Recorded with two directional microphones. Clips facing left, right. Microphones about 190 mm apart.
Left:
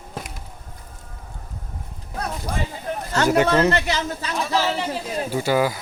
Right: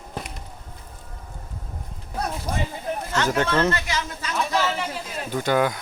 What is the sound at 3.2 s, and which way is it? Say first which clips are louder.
Speech: left 5 dB; 10° left (ahead or behind).